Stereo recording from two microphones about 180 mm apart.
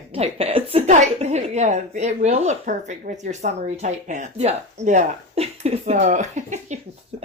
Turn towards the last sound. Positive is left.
turn(degrees=-40)  # may be behind; listen again after turning